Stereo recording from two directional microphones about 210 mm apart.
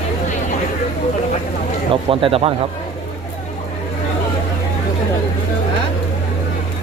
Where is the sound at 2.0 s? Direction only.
25° right (ahead or behind).